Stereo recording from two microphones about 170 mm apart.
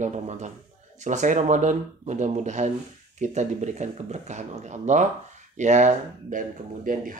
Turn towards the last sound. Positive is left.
turn(degrees=-50)  # may be behind; listen again after turning